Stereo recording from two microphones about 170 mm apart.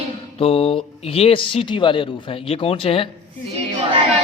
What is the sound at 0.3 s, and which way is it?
Speech, 35° left (ahead or behind).